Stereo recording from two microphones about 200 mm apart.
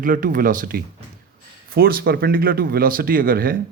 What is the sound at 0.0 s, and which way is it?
Speech, 45° right (ahead or behind).